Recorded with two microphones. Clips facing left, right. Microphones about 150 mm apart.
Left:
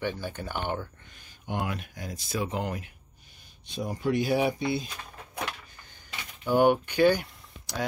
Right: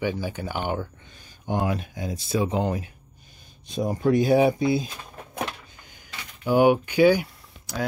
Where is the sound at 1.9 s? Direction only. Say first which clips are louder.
Right 7 dB; 25° right (ahead or behind).